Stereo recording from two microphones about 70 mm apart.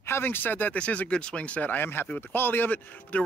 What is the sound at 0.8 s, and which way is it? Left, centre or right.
Speech, centre.